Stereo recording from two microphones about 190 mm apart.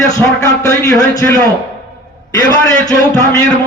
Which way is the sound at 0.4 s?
15° left (ahead or behind).